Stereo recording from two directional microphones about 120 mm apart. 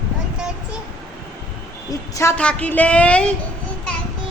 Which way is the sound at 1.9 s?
25° left (ahead or behind).